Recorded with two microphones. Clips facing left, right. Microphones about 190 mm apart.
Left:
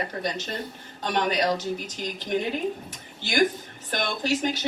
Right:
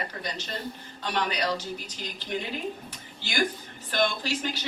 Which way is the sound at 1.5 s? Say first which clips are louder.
Left 5 dB; 45° left (ahead or behind).